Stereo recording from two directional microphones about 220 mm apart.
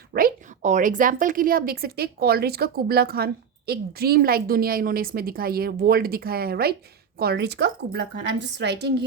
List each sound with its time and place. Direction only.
0.1 s a woman's voice: 35° right (ahead or behind)